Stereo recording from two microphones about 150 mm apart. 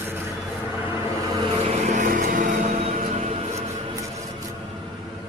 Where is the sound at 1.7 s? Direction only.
50° right (ahead or behind).